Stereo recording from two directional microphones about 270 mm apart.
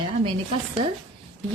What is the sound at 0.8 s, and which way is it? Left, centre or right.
Speech, right.